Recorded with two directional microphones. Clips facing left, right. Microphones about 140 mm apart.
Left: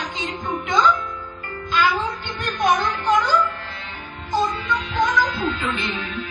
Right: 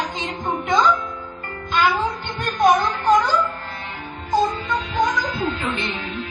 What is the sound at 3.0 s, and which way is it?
Music, 40° right (ahead or behind).